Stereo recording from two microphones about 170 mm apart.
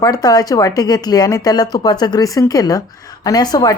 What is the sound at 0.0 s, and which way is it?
Speech, 20° left (ahead or behind).